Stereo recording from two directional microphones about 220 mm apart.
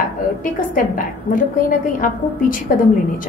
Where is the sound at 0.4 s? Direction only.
40° left (ahead or behind).